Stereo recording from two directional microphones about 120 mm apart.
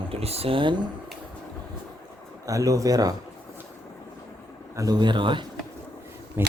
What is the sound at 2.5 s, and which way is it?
Speech, 30° right (ahead or behind).